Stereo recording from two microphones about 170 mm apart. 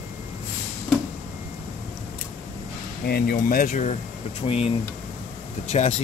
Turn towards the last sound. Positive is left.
turn(degrees=40)  # may be behind; listen again after turning